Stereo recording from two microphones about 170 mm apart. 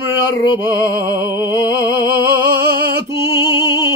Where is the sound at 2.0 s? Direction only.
60° right (ahead or behind).